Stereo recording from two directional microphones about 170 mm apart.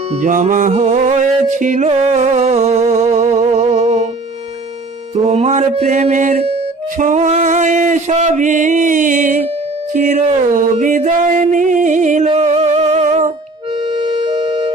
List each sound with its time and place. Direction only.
0.2 s music: 45° right (ahead or behind)
5.1 s music: 40° right (ahead or behind)
9.9 s a sound: 45° right (ahead or behind)
12.3 s music: 40° right (ahead or behind)